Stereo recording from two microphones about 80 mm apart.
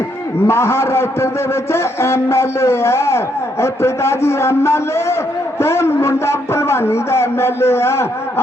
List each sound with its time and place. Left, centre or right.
0.4 s a man's voice: left